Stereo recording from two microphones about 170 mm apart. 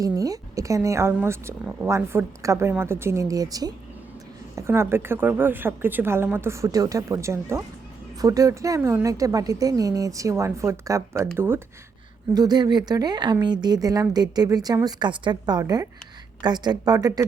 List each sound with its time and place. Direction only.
0.0 s a woman's voice: 20° right (ahead or behind)
12.3 s a woman's voice: 25° right (ahead or behind)